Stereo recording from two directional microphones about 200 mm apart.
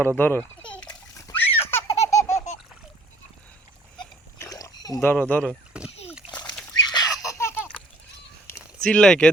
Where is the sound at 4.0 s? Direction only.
15° left (ahead or behind).